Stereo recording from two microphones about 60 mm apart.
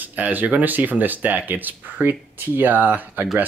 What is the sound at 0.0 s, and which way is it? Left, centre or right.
Speech, right.